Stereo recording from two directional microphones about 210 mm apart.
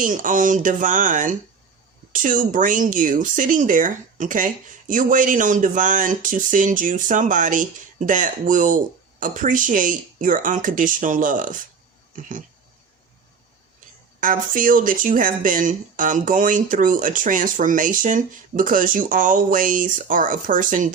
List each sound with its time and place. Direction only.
0.0 s speech: 40° right (ahead or behind)
14.2 s speech: 40° right (ahead or behind)